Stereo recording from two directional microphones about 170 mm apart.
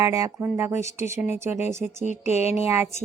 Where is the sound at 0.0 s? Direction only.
20° right (ahead or behind).